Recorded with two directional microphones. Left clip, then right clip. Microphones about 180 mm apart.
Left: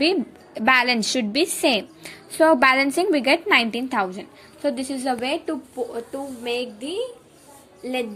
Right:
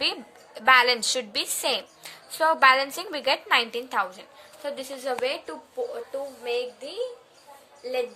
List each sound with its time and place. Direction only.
0.0 s a woman's voice: 15° left (ahead or behind); by 8.0 s 40° left (ahead or behind)